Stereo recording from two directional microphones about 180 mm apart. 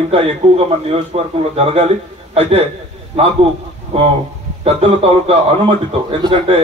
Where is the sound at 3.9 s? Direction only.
35° right (ahead or behind).